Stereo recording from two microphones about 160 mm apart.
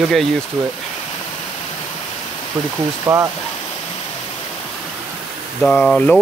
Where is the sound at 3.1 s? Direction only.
25° right (ahead or behind).